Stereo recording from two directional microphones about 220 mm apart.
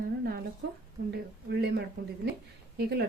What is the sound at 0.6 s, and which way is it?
Speech, 45° right (ahead or behind).